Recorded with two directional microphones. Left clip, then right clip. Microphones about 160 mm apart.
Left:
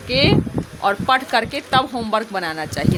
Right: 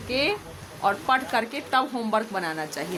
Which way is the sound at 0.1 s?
30° left (ahead or behind).